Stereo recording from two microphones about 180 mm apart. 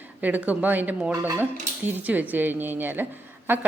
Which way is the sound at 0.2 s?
10° right (ahead or behind).